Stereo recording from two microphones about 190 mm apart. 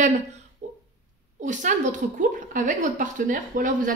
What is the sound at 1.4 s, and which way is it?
Speech, 40° right (ahead or behind).